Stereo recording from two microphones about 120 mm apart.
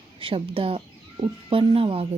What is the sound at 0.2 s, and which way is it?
Speech, 50° right (ahead or behind).